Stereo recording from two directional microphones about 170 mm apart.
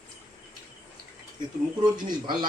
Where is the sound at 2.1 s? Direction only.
25° right (ahead or behind).